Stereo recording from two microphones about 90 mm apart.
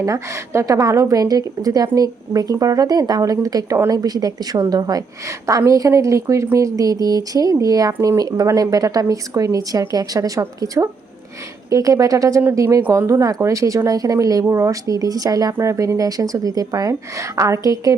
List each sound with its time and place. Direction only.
0.0 s a woman's voice: 35° right (ahead or behind)
11.7 s a woman's voice: 40° right (ahead or behind)